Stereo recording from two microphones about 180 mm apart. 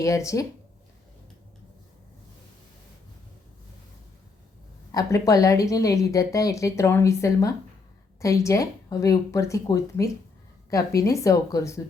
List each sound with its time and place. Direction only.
0.0 s a woman's voice: 15° left (ahead or behind)
4.9 s a woman's voice: 20° left (ahead or behind)